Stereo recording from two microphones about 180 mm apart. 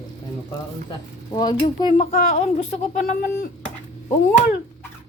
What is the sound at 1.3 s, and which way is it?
Speech, 25° left (ahead or behind).